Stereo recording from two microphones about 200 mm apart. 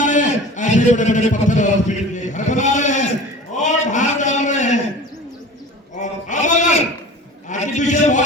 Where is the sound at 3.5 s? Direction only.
35° left (ahead or behind).